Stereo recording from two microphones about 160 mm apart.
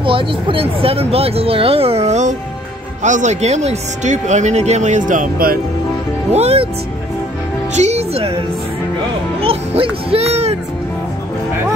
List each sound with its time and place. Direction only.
0.0 s speech: 35° right (ahead or behind); by 5.6 s 60° right (ahead or behind)
6.3 s music: 40° right (ahead or behind)
7.7 s music: 45° right (ahead or behind)
9.4 s music: 35° right (ahead or behind)